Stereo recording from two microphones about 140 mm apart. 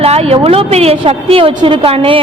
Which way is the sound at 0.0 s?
45° right (ahead or behind).